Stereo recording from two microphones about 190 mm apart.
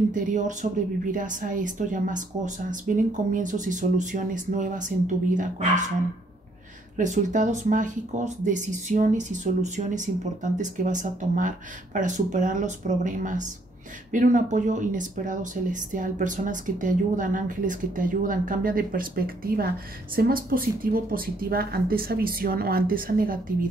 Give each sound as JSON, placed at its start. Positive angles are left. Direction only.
{"t": 0.1, "sound": "speech", "side_deg": -40}
{"t": 7.0, "sound": "speech", "side_deg": -40}